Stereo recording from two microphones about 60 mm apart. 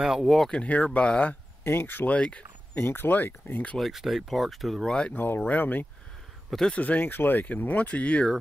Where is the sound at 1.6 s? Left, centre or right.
Left.